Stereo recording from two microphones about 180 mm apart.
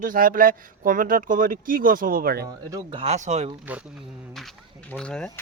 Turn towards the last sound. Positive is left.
turn(degrees=5)  # may be behind; listen again after turning